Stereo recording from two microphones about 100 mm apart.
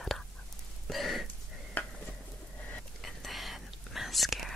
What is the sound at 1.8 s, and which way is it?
Stir, 20° left (ahead or behind).